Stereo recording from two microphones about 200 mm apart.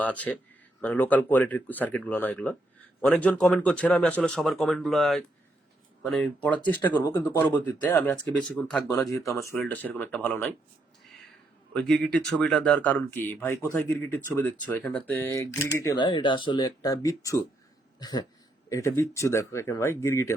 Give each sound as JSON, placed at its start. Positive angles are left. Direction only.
{"t": 0.0, "sound": "speech", "side_deg": 10}
{"t": 11.7, "sound": "speech", "side_deg": 5}
{"t": 18.0, "sound": "a sound", "side_deg": 20}
{"t": 18.7, "sound": "speech", "side_deg": 15}